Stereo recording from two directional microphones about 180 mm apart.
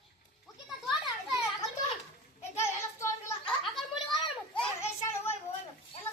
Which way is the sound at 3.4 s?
Centre (ahead or behind).